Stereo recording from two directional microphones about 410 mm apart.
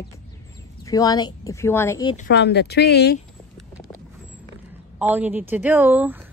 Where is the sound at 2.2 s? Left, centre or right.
Left.